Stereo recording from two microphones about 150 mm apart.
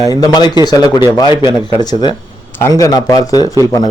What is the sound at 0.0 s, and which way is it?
A man's voice, 25° left (ahead or behind).